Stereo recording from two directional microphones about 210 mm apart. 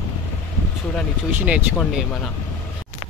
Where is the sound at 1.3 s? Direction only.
5° right (ahead or behind).